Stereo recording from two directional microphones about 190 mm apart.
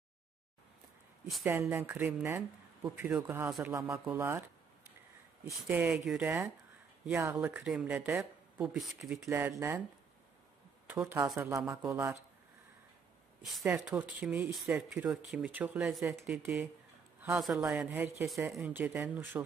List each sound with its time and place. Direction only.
1.2 s speech: 5° right (ahead or behind)
9.2 s speech: 15° right (ahead or behind)
10.9 s speech: 10° right (ahead or behind)
13.5 s speech: centre (ahead or behind)